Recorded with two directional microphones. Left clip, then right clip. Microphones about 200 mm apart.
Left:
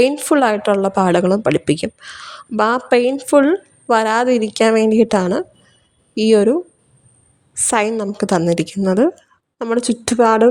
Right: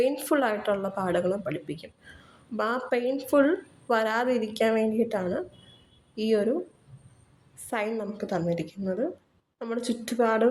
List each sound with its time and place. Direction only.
0.1 s speech: 40° left (ahead or behind)
3.2 s speech: 40° left (ahead or behind)